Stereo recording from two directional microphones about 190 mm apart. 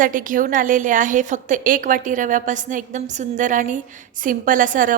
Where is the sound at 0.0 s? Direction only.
45° right (ahead or behind).